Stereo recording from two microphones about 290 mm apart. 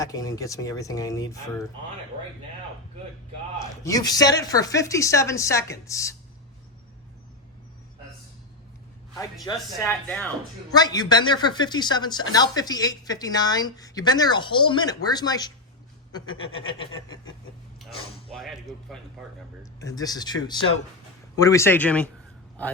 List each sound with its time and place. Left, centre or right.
0.0 s speech: centre
3.6 s speech: centre
9.4 s speech: centre
18.3 s speech: centre
19.8 s a man's voice: centre